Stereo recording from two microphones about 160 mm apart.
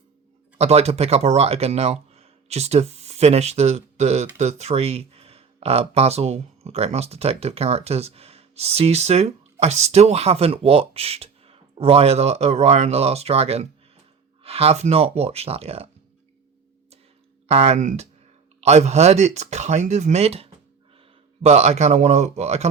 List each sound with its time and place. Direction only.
0.6 s speech: 40° right (ahead or behind)
17.5 s speech: 40° right (ahead or behind)